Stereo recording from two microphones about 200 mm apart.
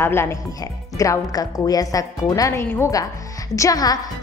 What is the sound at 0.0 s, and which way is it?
A woman's voice, 10° left (ahead or behind).